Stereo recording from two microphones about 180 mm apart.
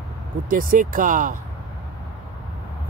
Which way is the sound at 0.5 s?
50° right (ahead or behind).